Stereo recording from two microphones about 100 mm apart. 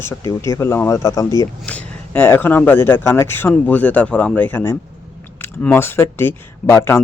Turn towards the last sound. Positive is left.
turn(degrees=25)  # may be behind; listen again after turning